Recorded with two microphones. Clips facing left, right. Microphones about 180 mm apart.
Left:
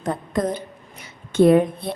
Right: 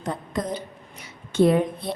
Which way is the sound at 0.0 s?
50° left (ahead or behind).